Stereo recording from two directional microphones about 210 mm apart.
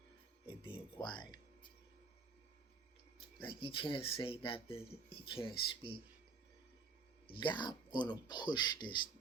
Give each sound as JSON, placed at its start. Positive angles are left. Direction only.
{"t": 0.4, "sound": "music", "side_deg": 25}
{"t": 3.4, "sound": "speech", "side_deg": 25}
{"t": 7.3, "sound": "speech", "side_deg": 20}